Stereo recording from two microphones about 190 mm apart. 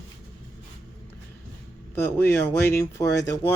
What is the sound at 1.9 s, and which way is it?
Speech, 10° left (ahead or behind).